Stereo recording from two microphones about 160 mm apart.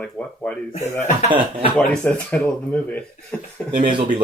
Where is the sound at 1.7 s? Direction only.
5° left (ahead or behind).